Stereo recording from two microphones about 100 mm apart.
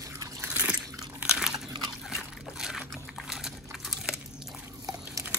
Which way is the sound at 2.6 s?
5° right (ahead or behind).